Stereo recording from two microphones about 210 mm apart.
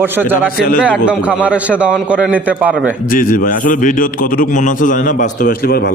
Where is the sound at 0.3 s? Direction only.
40° left (ahead or behind).